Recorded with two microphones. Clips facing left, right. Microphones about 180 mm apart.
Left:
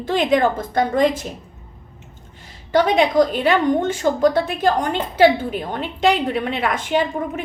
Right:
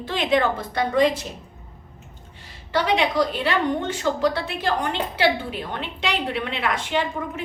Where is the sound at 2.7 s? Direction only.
45° left (ahead or behind).